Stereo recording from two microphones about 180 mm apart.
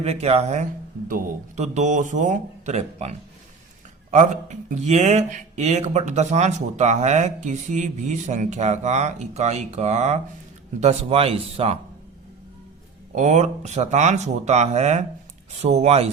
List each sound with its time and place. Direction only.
0.0 s speech: 35° right (ahead or behind)
13.1 s speech: 40° right (ahead or behind)